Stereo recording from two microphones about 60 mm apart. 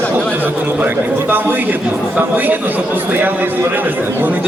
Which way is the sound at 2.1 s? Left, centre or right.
Right.